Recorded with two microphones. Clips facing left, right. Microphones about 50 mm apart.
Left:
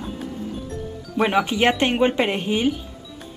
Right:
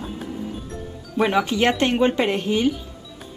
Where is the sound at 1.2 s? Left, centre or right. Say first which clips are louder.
Even; centre.